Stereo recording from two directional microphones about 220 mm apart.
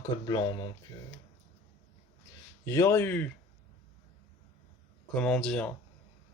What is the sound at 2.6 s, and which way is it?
Speech, 15° left (ahead or behind).